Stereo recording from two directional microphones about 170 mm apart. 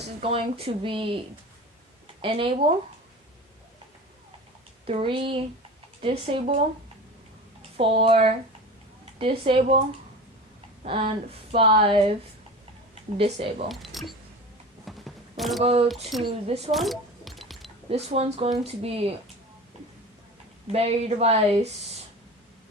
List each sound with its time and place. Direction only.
0.2 s speech: 35° right (ahead or behind)
2.2 s speech: 30° right (ahead or behind)
4.9 s speech: 30° right (ahead or behind)
7.8 s speech: 30° right (ahead or behind)
10.8 s speech: 30° right (ahead or behind)
13.1 s speech: 35° right (ahead or behind)
13.7 s speech: centre (ahead or behind)
14.8 s single-lens reflex camera: centre (ahead or behind)
15.6 s speech: 35° right (ahead or behind)
15.9 s speech: centre (ahead or behind)
16.2 s speech: 35° right (ahead or behind)
16.7 s music: centre (ahead or behind)
17.8 s speech: 40° right (ahead or behind)
20.7 s speech: 40° right (ahead or behind)